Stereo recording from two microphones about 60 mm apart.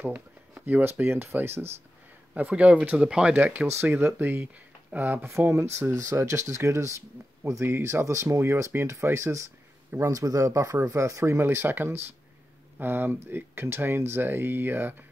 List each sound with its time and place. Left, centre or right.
0.0 s speech: right
2.3 s speech: right
3.3 s speech: right
5.7 s speech: right
7.6 s speech: right
11.3 s speech: right